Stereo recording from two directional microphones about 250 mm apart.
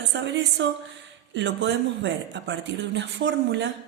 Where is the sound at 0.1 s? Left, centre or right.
Right.